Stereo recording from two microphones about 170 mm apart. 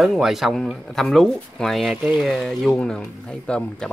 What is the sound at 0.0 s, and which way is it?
Speech, centre (ahead or behind).